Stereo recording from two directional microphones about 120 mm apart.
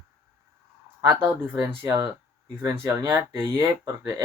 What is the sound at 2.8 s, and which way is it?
Speech, 20° right (ahead or behind).